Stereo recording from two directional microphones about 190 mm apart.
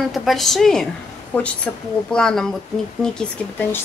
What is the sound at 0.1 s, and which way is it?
A woman's voice, centre (ahead or behind).